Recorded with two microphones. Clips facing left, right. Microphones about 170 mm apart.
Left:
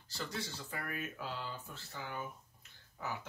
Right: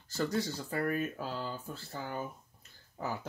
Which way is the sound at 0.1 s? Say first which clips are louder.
Right 10 dB; 45° right (ahead or behind).